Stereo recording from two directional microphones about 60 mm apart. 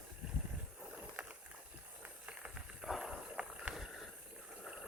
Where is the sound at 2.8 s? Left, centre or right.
Centre.